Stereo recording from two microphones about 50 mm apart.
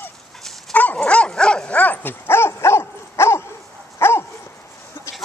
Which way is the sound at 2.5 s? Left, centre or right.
Left.